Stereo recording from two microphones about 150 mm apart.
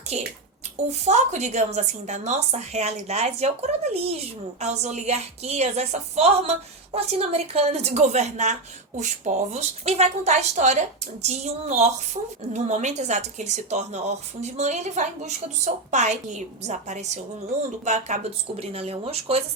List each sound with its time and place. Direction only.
0.1 s a woman's voice: 50° right (ahead or behind)